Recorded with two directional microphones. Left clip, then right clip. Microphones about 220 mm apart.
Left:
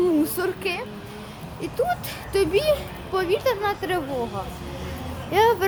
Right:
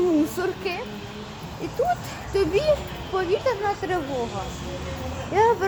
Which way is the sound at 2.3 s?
10° left (ahead or behind).